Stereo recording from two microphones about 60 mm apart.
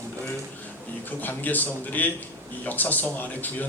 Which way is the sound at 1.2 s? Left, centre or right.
Left.